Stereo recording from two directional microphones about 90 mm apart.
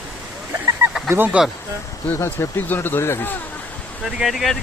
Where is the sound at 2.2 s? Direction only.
30° left (ahead or behind).